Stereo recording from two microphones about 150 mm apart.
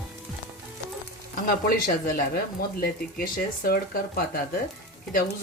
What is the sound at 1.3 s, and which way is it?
Speech, 70° left (ahead or behind).